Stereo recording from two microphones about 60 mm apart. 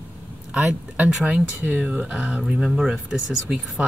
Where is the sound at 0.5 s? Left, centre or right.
Right.